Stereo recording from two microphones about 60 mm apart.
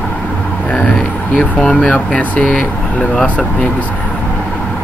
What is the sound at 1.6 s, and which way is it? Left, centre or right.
Speech, centre.